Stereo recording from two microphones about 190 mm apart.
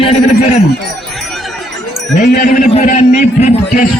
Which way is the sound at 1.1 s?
Centre (ahead or behind).